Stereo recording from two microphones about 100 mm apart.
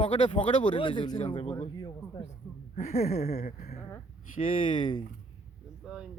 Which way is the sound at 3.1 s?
90° left.